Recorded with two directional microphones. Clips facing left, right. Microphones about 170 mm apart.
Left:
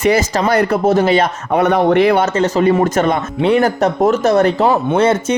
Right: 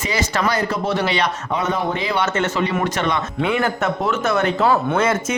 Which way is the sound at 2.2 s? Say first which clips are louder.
Left 6 dB; 35° left (ahead or behind).